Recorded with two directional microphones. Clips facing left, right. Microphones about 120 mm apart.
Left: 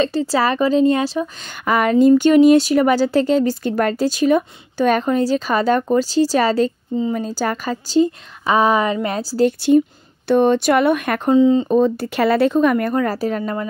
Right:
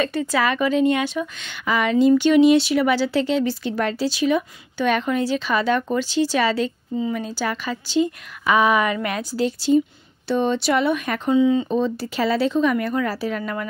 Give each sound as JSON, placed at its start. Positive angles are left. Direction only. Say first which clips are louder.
{"t": 0.0, "sound": "a woman's voice", "louder": "left 4 dB", "side_deg": 30}
{"t": 1.7, "sound": "a woman's voice", "louder": "left 4 dB", "side_deg": 45}
{"t": 9.7, "sound": "speech", "louder": "left 4 dB", "side_deg": 55}
{"t": 11.3, "sound": "a woman's voice", "louder": "left 4 dB", "side_deg": 35}
{"t": 11.7, "sound": "speech", "louder": "left 6 dB", "side_deg": 50}
{"t": 13.4, "sound": "speech", "louder": "left 4 dB", "side_deg": 30}